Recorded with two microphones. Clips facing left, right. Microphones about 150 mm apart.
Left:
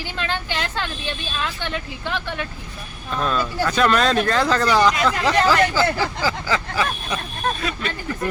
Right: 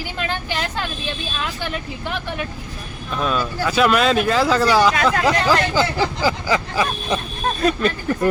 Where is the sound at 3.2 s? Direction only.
5° right (ahead or behind).